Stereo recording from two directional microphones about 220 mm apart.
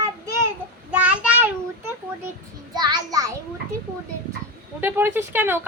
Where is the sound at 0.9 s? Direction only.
5° right (ahead or behind).